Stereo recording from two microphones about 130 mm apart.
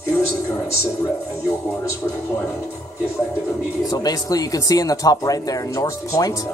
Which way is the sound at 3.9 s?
30° left (ahead or behind).